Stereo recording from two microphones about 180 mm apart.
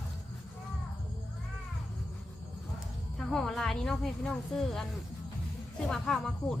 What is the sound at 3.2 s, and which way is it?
A woman's voice, centre (ahead or behind).